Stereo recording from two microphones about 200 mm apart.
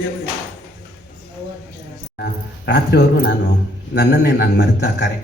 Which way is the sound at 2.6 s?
55° left (ahead or behind).